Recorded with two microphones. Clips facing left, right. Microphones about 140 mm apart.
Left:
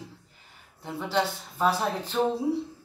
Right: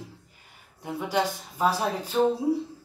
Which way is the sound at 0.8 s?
10° right (ahead or behind).